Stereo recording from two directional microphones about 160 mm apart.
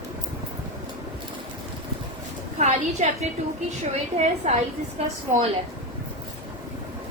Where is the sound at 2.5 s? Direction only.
45° right (ahead or behind).